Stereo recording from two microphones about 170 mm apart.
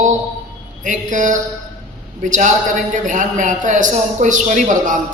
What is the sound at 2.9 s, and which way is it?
A man's voice, 50° right (ahead or behind).